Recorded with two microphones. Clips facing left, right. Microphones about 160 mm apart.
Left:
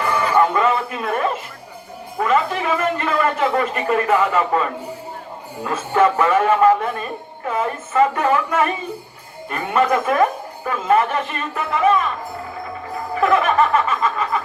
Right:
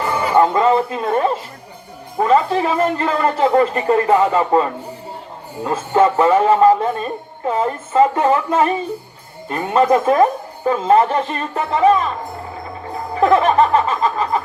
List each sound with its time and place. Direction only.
0.3 s music: 25° right (ahead or behind)
2.1 s speech: 30° right (ahead or behind)
13.1 s speech: 30° right (ahead or behind)